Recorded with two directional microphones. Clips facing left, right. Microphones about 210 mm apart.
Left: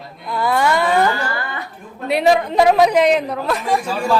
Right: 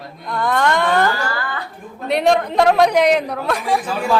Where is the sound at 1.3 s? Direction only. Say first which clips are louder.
Even; 20° left (ahead or behind).